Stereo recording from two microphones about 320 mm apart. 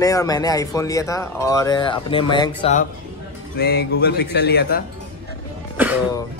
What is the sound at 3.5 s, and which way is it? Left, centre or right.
Speech, left.